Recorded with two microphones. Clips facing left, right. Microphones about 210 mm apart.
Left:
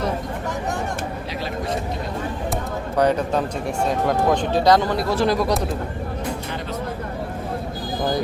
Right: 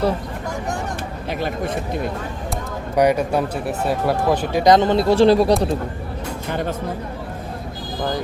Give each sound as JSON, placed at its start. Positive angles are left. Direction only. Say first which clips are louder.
{"t": 1.3, "sound": "speech", "louder": "right 4 dB", "side_deg": -55}
{"t": 2.9, "sound": "speech", "louder": "right 2 dB", "side_deg": -10}
{"t": 6.5, "sound": "a sound", "louder": "right 5 dB", "side_deg": -50}